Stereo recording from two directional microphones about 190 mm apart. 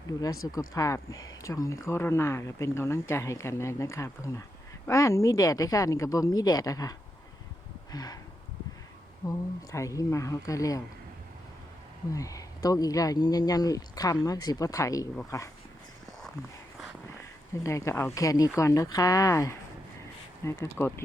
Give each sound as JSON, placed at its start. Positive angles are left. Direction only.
{"t": 0.7, "sound": "speech", "side_deg": 15}
{"t": 7.9, "sound": "speech", "side_deg": 20}
{"t": 9.7, "sound": "speech", "side_deg": 15}
{"t": 12.1, "sound": "speech", "side_deg": 15}
{"t": 17.5, "sound": "speech", "side_deg": 15}